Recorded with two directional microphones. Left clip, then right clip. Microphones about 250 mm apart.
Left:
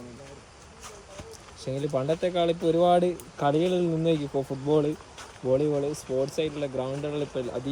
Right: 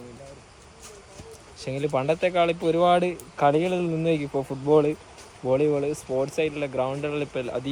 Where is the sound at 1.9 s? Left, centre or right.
Centre.